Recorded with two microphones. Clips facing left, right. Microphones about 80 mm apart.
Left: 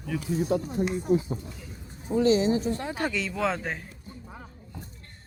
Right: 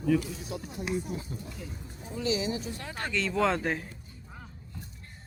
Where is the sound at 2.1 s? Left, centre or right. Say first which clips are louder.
Left 9 dB; left.